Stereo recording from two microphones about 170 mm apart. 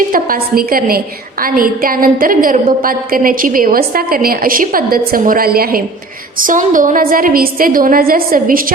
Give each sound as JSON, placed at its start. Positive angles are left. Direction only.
{"t": 0.1, "sound": "a woman's voice", "side_deg": -55}